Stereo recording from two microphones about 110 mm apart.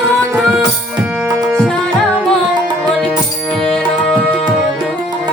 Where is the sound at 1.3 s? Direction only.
30° right (ahead or behind).